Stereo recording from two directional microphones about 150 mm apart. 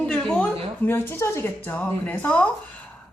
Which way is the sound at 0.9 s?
15° left (ahead or behind).